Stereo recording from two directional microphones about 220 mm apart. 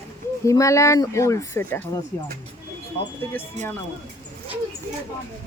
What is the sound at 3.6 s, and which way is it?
Speech, 30° right (ahead or behind).